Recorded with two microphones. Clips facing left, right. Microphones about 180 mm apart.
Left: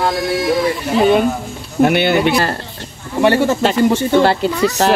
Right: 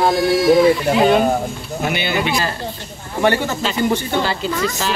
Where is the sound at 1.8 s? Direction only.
60° left (ahead or behind).